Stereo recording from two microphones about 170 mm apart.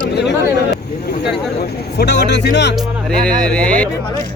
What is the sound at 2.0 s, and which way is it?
Speech, 90° left.